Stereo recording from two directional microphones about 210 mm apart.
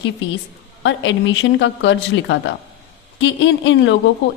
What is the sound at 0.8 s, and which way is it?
A woman's voice, 60° left (ahead or behind).